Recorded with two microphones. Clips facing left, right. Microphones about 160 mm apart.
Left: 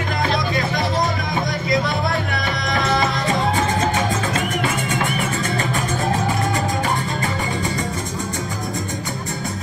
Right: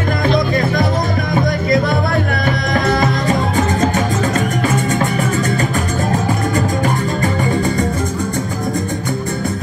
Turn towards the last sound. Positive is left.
turn(degrees=-50)  # may be behind; listen again after turning